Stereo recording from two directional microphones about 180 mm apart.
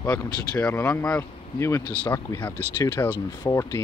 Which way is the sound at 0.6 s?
10° left (ahead or behind).